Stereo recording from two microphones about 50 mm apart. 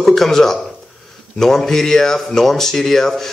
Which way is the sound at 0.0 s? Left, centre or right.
Centre.